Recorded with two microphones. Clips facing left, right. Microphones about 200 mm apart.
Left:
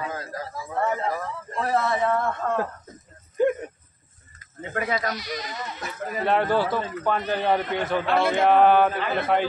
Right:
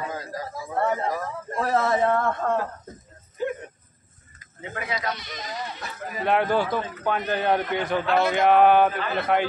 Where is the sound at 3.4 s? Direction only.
50° left (ahead or behind).